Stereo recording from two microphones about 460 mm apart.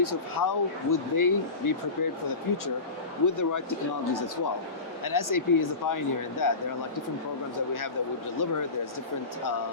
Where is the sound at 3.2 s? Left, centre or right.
Left.